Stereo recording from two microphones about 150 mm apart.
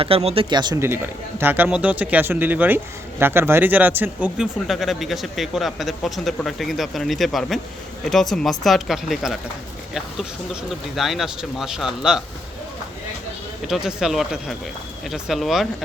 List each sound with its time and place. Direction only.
0.0 s speech: 40° right (ahead or behind)
0.5 s speech: 30° right (ahead or behind)
0.8 s speech: 15° right (ahead or behind)
4.4 s speech: centre (ahead or behind)
13.7 s speech: 5° right (ahead or behind)